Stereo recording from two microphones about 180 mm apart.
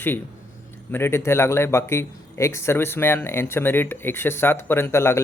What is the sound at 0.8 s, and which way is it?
Speech, 15° left (ahead or behind).